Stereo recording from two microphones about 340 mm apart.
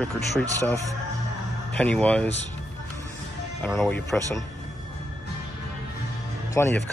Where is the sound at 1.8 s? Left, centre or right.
Centre.